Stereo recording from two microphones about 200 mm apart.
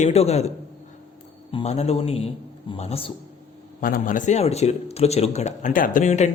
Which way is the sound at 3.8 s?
45° left (ahead or behind).